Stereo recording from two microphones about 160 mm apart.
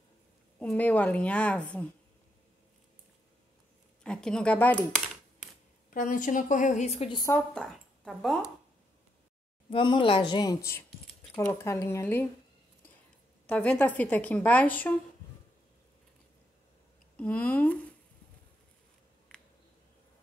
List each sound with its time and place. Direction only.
0.6 s a woman's voice: 10° left (ahead or behind)
4.0 s speech: 5° left (ahead or behind)
5.9 s a woman's voice: 55° left (ahead or behind)
7.1 s speech: 25° left (ahead or behind)
7.3 s speech: 5° left (ahead or behind)
9.7 s a woman's voice: 30° left (ahead or behind); by 12.3 s 15° left (ahead or behind)
13.5 s a woman's voice: 10° left (ahead or behind)
17.2 s a woman's voice: 10° left (ahead or behind)